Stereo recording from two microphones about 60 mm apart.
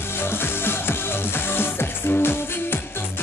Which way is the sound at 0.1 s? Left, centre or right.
Left.